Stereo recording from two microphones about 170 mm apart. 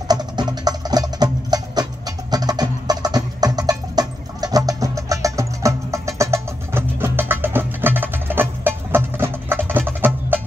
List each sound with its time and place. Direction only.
0.1 s music: 25° right (ahead or behind)